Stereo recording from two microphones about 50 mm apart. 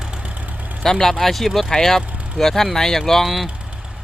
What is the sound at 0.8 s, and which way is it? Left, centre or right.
Speech, centre.